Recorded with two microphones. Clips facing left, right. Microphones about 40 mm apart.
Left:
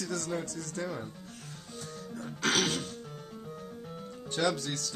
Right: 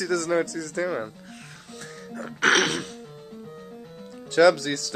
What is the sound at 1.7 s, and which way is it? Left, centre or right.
Music, right.